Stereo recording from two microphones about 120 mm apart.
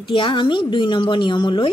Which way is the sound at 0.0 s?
45° left (ahead or behind).